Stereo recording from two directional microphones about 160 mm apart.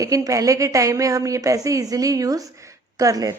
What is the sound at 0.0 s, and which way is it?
A woman's voice, 20° right (ahead or behind).